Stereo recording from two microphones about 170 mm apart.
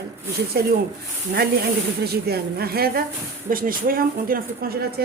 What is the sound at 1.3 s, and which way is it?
Speech, 65° right (ahead or behind).